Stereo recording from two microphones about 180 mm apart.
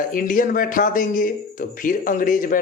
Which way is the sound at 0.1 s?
50° left (ahead or behind).